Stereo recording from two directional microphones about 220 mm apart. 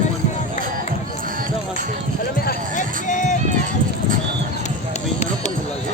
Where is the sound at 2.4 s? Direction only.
40° left (ahead or behind).